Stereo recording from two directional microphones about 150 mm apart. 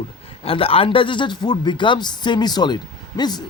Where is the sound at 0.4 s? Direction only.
40° left (ahead or behind).